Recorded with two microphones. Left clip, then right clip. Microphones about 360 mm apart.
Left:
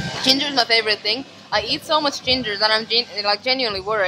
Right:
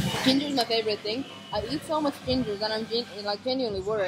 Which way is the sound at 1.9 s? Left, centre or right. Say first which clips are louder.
Left 8 dB; left.